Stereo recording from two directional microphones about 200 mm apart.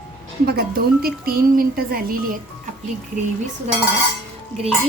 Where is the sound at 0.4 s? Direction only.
50° right (ahead or behind).